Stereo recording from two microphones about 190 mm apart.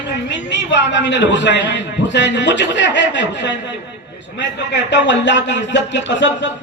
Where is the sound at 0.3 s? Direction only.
65° left (ahead or behind).